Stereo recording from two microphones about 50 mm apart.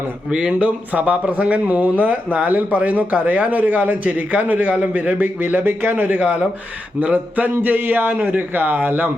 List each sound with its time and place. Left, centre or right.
0.3 s speech: centre
0.9 s speech: right
6.1 s speech: right